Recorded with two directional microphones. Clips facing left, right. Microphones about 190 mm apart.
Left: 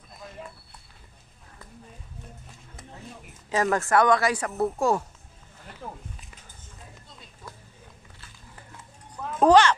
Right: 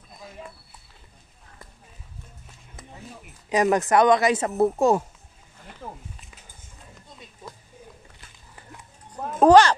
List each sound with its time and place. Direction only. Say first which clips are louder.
3.4 s speech: right 4 dB; 15° right (ahead or behind)
9.4 s a child's voice: right 3 dB; 45° right (ahead or behind)